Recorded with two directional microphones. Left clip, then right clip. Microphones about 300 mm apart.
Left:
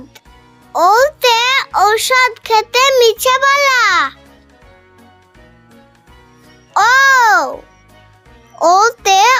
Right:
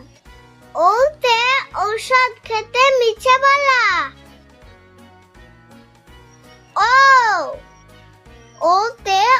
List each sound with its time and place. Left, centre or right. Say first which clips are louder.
0.7 s a child's voice: left 4 dB; left
6.7 s music: left 2 dB; left
8.5 s music: left 6 dB; left